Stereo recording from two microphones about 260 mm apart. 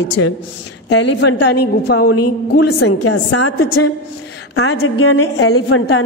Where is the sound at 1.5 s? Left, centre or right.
Left.